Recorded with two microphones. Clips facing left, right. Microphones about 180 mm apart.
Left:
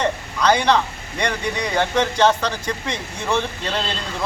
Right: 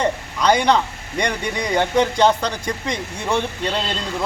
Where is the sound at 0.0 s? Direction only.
15° right (ahead or behind).